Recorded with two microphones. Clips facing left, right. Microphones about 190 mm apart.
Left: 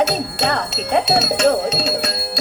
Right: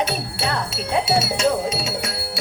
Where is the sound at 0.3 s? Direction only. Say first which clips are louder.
Left 4 dB; 70° left (ahead or behind).